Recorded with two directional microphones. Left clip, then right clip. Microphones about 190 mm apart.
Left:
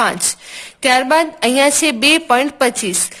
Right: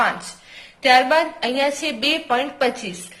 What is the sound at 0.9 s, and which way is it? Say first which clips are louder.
A woman's voice: left 2 dB; 50° left (ahead or behind).